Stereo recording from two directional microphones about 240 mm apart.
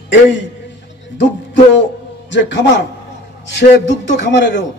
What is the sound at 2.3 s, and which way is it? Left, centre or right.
A man's voice, left.